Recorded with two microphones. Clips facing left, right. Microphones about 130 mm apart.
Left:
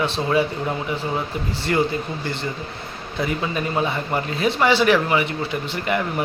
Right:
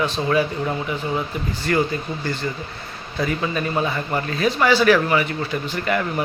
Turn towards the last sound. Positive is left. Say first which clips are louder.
# right 1 dB
turn(degrees=20)  # may be behind; listen again after turning